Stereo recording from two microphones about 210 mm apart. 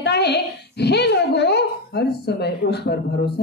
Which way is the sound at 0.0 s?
50° left (ahead or behind).